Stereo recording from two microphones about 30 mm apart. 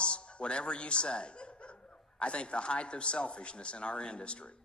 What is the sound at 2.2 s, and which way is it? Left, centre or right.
A man's voice, left.